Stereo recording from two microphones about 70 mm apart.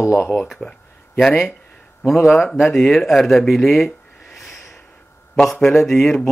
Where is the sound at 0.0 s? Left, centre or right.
Left.